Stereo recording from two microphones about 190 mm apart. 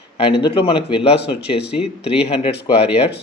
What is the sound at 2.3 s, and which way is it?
Speech, 30° left (ahead or behind).